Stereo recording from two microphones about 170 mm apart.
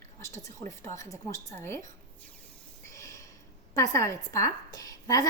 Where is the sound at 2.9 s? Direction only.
15° left (ahead or behind).